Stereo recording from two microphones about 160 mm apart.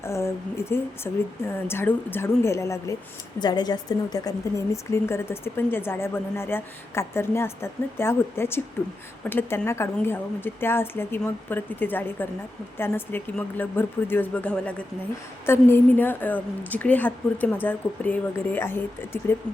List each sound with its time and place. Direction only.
0.0 s a woman's voice: 15° left (ahead or behind)